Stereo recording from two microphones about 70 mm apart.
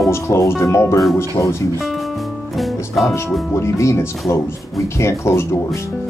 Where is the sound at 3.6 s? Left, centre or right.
Left.